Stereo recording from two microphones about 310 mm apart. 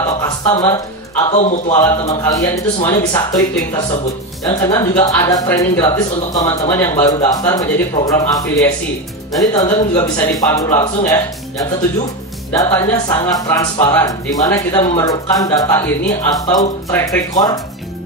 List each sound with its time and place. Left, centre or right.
0.5 s a man's voice: centre
2.0 s speech: centre
12.5 s speech: centre